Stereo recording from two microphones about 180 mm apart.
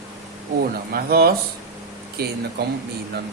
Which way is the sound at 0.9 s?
60° right (ahead or behind).